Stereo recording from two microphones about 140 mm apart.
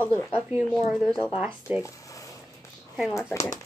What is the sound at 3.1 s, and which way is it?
Speech, 20° left (ahead or behind).